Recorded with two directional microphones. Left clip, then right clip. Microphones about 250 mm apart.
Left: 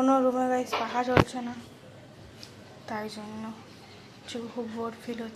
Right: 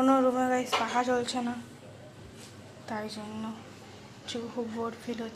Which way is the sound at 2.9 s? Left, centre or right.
Centre.